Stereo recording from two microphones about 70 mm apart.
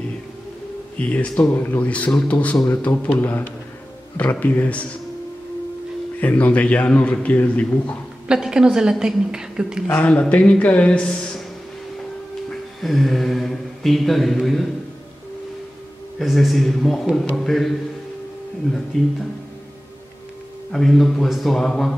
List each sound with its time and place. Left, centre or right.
0.9 s speech: centre
1.5 s a man's voice: left
1.9 s a man's voice: centre
6.1 s a man's voice: left
8.3 s a woman's voice: centre
9.8 s a man's voice: left
12.4 s speech: centre
16.2 s speech: centre
18.9 s speech: centre
20.7 s speech: centre